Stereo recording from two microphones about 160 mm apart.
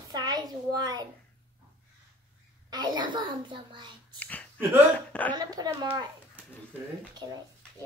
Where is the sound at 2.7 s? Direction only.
25° right (ahead or behind).